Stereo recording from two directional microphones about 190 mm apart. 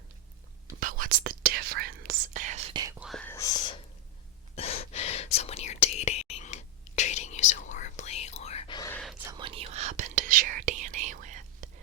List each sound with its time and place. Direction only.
0.8 s whispering: 45° right (ahead or behind)
3.0 s whispering: 5° left (ahead or behind)
4.5 s whispering: 35° left (ahead or behind)
8.9 s whispering: 5° left (ahead or behind)
9.4 s whispering: 35° right (ahead or behind)